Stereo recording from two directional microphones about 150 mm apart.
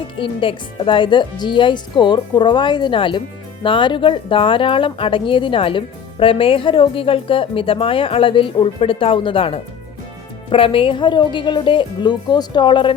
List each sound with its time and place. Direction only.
0.2 s speech: 35° left (ahead or behind)